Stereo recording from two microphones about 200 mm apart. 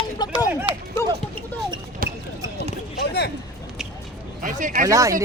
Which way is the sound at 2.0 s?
45° right (ahead or behind).